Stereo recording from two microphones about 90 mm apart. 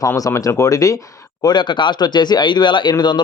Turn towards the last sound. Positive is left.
turn(degrees=60)  # may be behind; listen again after turning